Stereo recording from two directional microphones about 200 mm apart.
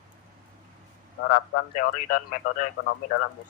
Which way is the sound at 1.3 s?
40° left (ahead or behind).